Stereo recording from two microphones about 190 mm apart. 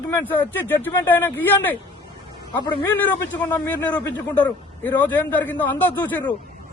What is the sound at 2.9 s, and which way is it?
Speech, 10° left (ahead or behind).